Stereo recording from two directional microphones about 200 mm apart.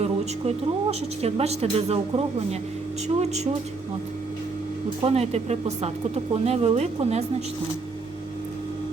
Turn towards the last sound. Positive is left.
turn(degrees=-30)  # may be behind; listen again after turning